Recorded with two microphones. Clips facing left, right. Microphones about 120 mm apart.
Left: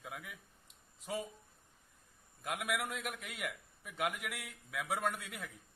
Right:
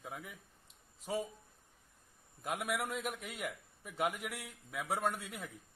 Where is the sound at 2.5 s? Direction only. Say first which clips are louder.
Right 1 dB; centre (ahead or behind).